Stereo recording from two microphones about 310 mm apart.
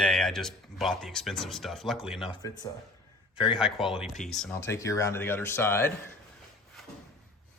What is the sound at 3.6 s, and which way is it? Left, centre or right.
Speech, centre.